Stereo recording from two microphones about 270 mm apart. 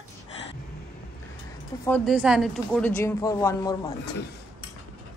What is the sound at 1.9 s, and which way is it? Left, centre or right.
A woman's voice, centre.